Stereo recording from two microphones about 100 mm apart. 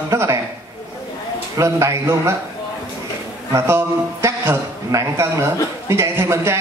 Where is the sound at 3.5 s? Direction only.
30° right (ahead or behind).